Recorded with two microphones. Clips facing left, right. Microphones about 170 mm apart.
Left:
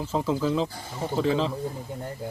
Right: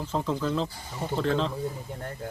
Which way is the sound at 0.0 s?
5° left (ahead or behind).